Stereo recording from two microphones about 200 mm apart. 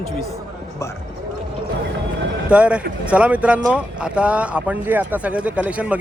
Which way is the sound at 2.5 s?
5° right (ahead or behind).